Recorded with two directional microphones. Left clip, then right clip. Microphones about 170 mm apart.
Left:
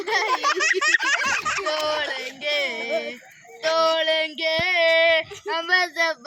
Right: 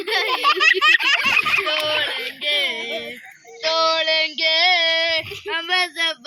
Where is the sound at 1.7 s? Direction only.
Centre (ahead or behind).